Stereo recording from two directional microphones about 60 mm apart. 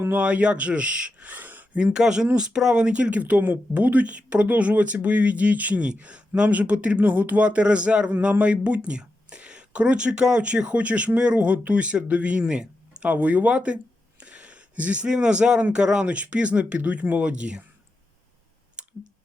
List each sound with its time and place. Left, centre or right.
0.1 s speech: right
18.8 s clicking: centre